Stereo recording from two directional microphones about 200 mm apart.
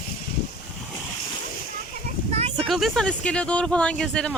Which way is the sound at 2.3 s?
30° right (ahead or behind).